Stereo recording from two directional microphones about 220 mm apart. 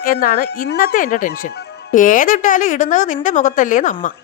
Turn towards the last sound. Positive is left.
turn(degrees=35)  # may be behind; listen again after turning